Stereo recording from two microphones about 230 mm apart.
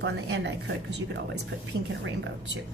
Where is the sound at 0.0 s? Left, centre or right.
Right.